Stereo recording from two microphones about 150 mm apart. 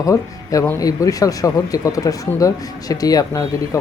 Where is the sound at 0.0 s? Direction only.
20° left (ahead or behind).